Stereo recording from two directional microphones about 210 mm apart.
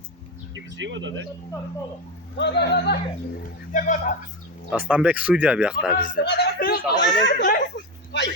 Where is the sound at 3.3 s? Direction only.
40° left (ahead or behind).